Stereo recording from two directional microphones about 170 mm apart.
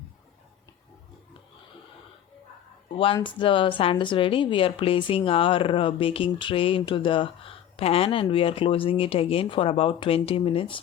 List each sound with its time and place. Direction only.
2.9 s a woman's voice: 30° left (ahead or behind)